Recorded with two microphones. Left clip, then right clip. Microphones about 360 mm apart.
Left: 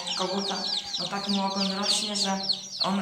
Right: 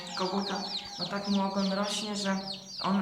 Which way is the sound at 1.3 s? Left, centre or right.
Centre.